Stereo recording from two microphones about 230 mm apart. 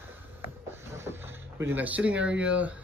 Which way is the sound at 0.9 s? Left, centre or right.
Centre.